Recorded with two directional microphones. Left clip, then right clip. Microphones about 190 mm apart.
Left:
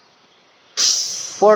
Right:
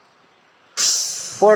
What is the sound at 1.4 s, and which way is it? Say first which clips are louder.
Speech: left 1 dB; 5° left (ahead or behind).